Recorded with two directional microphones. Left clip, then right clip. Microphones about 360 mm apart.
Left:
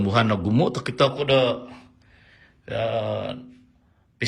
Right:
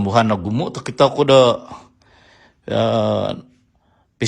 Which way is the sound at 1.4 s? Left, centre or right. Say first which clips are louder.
Right 9 dB; right.